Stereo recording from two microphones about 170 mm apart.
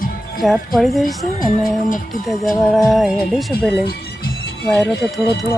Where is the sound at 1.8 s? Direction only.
55° left (ahead or behind).